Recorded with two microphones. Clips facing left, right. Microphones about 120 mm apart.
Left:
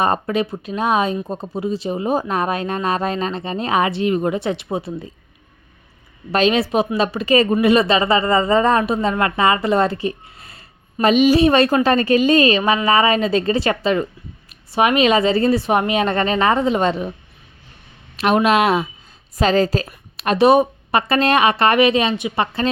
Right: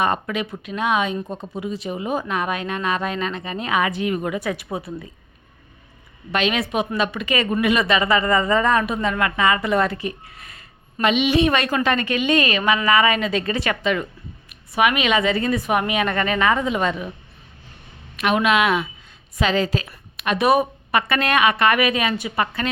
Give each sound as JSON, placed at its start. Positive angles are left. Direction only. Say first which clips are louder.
{"t": 0.0, "sound": "speech", "louder": "left 4 dB", "side_deg": 35}
{"t": 6.3, "sound": "speech", "louder": "left 5 dB", "side_deg": 35}
{"t": 18.2, "sound": "a woman's voice", "louder": "left 3 dB", "side_deg": 35}